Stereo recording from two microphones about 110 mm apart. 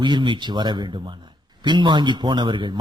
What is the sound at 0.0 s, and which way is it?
A man's voice, 45° right (ahead or behind).